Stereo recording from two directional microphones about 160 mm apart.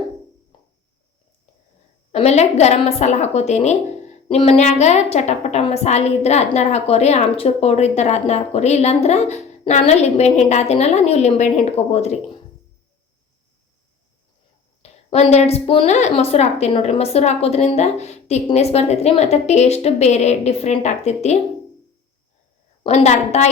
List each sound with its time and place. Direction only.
2.1 s a woman's voice: 45° left (ahead or behind)
14.8 s a woman's voice: 45° left (ahead or behind)
22.8 s a woman's voice: 45° left (ahead or behind)